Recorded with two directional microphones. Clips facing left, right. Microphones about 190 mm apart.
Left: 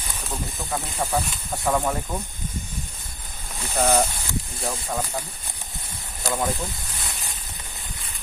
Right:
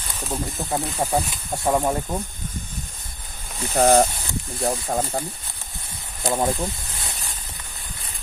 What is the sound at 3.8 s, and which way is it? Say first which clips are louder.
Speech: right 5 dB; 35° right (ahead or behind).